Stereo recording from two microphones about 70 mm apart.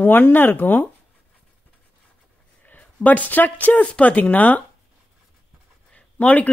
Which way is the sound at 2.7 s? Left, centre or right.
Left.